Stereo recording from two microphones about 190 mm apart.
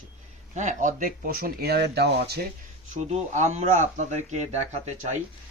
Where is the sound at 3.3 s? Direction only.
40° right (ahead or behind).